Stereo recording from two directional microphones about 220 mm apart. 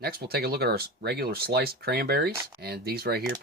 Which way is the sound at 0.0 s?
45° right (ahead or behind).